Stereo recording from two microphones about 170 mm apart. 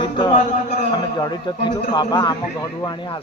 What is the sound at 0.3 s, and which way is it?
Speech, 45° left (ahead or behind).